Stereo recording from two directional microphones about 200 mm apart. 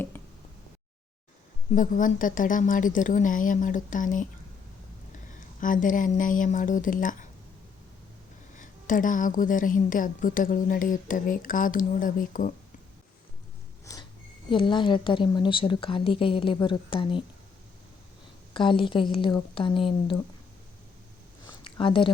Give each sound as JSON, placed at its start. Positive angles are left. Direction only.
{"t": 1.7, "sound": "a woman's voice", "side_deg": 40}
{"t": 5.5, "sound": "a woman's voice", "side_deg": 40}
{"t": 8.5, "sound": "a woman's voice", "side_deg": 40}
{"t": 14.5, "sound": "a woman's voice", "side_deg": 25}
{"t": 18.5, "sound": "a woman's voice", "side_deg": 25}
{"t": 21.4, "sound": "a sound", "side_deg": 25}